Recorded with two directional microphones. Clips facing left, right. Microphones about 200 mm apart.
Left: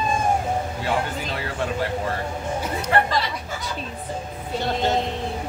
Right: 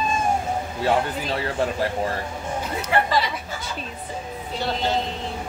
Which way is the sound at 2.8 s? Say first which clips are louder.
Right 1 dB; 5° right (ahead or behind).